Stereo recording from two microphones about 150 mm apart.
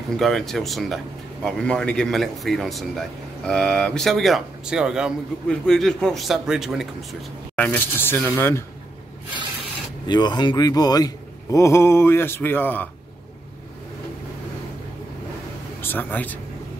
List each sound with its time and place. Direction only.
0.2 s speech: centre (ahead or behind)
7.5 s speech: 10° left (ahead or behind)
10.0 s a man's voice: 30° left (ahead or behind); by 12.9 s 10° left (ahead or behind)
15.8 s speech: 15° left (ahead or behind)